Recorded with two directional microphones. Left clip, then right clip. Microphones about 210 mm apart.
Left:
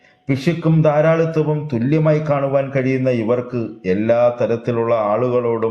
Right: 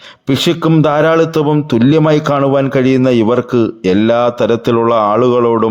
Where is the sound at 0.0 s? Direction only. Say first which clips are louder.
Right 7 dB; 45° right (ahead or behind).